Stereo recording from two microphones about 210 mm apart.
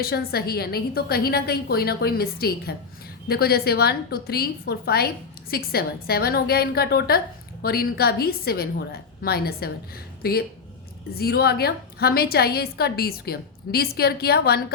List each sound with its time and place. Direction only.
0.0 s a woman's voice: 45° left (ahead or behind)